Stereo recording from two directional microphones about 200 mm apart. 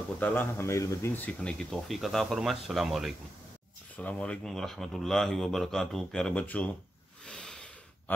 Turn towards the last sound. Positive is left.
turn(degrees=5)  # may be behind; listen again after turning